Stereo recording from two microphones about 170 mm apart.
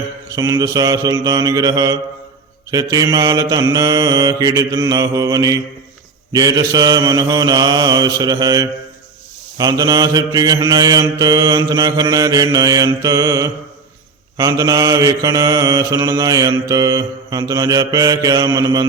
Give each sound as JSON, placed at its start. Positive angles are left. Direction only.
{"t": 0.3, "sound": "mantra", "side_deg": -20}